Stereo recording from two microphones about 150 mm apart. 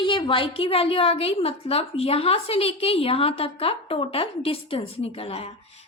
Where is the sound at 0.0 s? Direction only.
35° left (ahead or behind).